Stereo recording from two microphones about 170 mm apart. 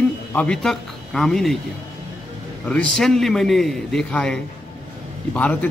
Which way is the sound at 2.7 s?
5° left (ahead or behind).